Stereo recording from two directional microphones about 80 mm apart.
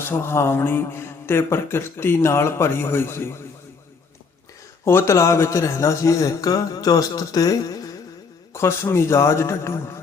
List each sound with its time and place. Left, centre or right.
0.0 s speech: left
4.9 s speech: left
8.5 s speech: left